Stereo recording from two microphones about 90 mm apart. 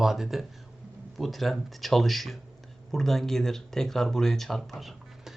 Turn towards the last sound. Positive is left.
turn(degrees=0)  # may be behind; listen again after turning